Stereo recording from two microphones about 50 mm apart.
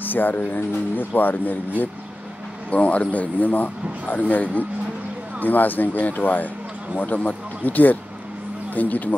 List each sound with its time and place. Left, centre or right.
0.0 s speech: left
2.7 s speech: left